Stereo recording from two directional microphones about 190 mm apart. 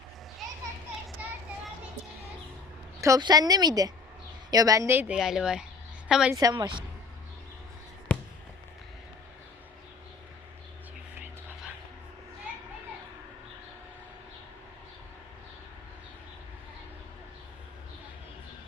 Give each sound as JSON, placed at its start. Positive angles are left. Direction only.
{"t": 3.0, "sound": "a woman's voice", "side_deg": -20}
{"t": 6.3, "sound": "a woman's voice", "side_deg": -20}
{"t": 8.1, "sound": "fireworks", "side_deg": 5}